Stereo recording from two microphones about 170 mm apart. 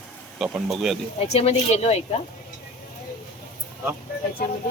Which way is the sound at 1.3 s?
35° left (ahead or behind).